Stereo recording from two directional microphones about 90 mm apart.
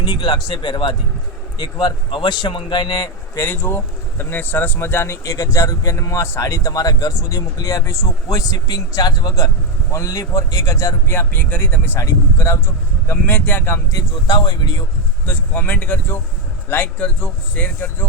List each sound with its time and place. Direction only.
0.0 s speech: 50° left (ahead or behind)
2.0 s speech: 60° left (ahead or behind); by 3.4 s 40° left (ahead or behind)
3.4 s speech: 25° left (ahead or behind); by 11.1 s 40° left (ahead or behind)
11.1 s speech: 20° left (ahead or behind)
11.9 s speech: 30° left (ahead or behind)
13.9 s speech: 50° left (ahead or behind)
15.3 s a man's voice: 20° left (ahead or behind)